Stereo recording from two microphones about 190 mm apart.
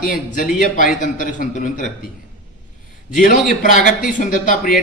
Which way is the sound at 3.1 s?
45° left (ahead or behind).